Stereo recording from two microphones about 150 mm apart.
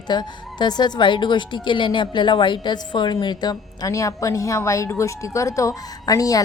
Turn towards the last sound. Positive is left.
turn(degrees=25)  # may be behind; listen again after turning